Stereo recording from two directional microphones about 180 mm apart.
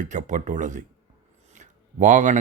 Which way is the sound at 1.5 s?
40° right (ahead or behind).